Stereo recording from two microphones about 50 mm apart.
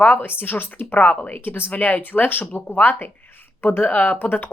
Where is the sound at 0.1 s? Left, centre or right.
Left.